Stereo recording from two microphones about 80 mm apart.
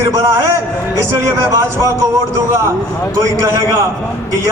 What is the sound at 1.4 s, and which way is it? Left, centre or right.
Speech, right.